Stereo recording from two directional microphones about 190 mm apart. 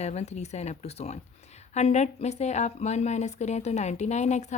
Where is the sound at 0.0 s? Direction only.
35° left (ahead or behind).